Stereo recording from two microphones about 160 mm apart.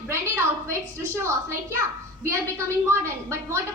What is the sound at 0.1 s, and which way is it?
A woman's voice, 15° right (ahead or behind).